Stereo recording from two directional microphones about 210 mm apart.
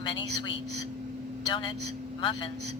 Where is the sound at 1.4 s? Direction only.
20° left (ahead or behind).